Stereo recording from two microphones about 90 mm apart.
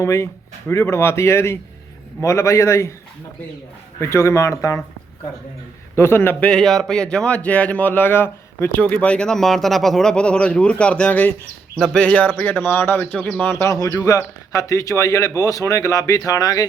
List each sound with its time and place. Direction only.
0.0 s speech: 35° left (ahead or behind)
4.0 s speech: 30° left (ahead or behind)
6.0 s speech: 25° left (ahead or behind)
6.4 s a man's voice: 10° left (ahead or behind); by 13.7 s 30° left (ahead or behind)
13.7 s speech: 40° left (ahead or behind)